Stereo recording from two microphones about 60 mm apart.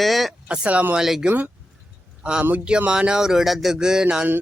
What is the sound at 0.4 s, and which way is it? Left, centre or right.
Speech, right.